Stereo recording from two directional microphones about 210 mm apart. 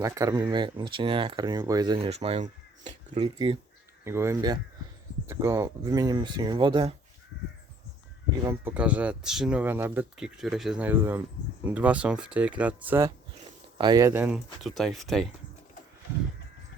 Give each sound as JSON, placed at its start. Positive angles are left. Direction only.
{"t": 0.0, "sound": "speech", "side_deg": -15}
{"t": 2.0, "sound": "speech", "side_deg": -30}
{"t": 4.0, "sound": "speech", "side_deg": -10}
{"t": 8.4, "sound": "speech", "side_deg": -10}
{"t": 13.7, "sound": "speech", "side_deg": -20}